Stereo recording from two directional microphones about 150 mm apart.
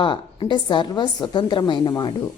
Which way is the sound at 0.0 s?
35° left (ahead or behind).